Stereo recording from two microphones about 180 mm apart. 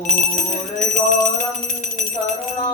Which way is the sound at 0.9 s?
45° left (ahead or behind).